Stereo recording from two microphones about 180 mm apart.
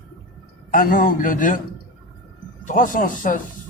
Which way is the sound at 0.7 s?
50° left (ahead or behind).